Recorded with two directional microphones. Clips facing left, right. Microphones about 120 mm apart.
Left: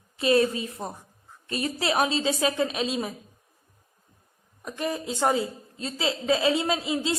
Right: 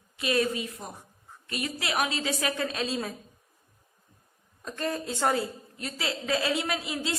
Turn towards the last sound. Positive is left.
turn(degrees=25)  # may be behind; listen again after turning